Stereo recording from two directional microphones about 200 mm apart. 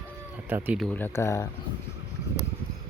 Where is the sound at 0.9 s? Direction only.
10° left (ahead or behind).